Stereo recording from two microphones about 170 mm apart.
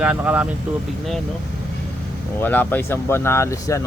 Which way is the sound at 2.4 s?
10° left (ahead or behind).